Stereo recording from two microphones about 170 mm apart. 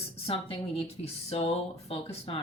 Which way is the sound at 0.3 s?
35° left (ahead or behind).